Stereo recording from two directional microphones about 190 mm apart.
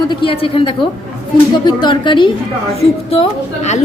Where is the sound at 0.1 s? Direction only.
25° left (ahead or behind).